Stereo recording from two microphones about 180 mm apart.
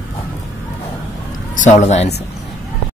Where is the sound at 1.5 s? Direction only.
45° left (ahead or behind).